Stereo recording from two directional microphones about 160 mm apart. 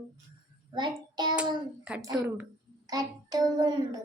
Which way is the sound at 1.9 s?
5° right (ahead or behind).